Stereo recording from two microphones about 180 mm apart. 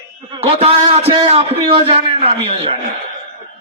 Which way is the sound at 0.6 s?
35° right (ahead or behind).